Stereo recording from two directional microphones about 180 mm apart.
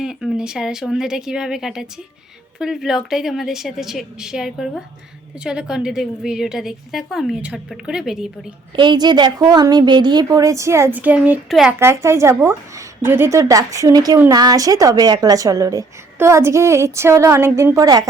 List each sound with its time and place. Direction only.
0.0 s a woman's voice: 5° right (ahead or behind)
8.7 s a woman's voice: 25° right (ahead or behind); by 11.7 s centre (ahead or behind)
11.8 s a woman's voice: 15° right (ahead or behind)